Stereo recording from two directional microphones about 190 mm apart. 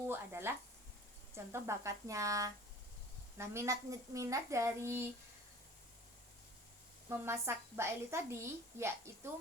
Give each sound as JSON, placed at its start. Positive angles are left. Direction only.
{"t": 0.0, "sound": "a sound", "side_deg": -10}
{"t": 1.6, "sound": "a woman's voice", "side_deg": -15}
{"t": 7.1, "sound": "a woman's voice", "side_deg": -15}